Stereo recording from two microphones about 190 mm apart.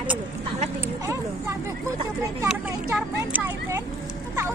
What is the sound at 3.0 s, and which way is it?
Speech, 10° right (ahead or behind).